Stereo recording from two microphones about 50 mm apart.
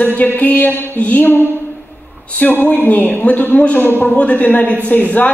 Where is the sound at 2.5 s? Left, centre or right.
Left.